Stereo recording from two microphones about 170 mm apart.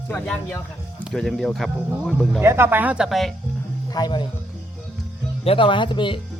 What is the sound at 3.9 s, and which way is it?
Speech, 25° left (ahead or behind).